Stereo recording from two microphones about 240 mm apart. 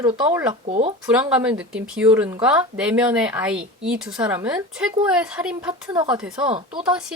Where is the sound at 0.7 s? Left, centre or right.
Right.